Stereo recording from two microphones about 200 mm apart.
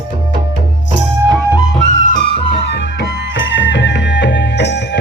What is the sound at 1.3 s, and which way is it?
Music, 15° right (ahead or behind).